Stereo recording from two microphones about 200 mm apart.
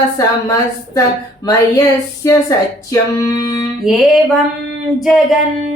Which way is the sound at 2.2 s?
15° left (ahead or behind).